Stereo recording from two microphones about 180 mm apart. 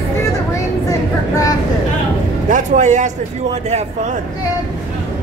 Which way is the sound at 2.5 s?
45° right (ahead or behind).